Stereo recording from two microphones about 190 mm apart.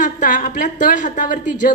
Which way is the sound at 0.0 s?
45° left (ahead or behind).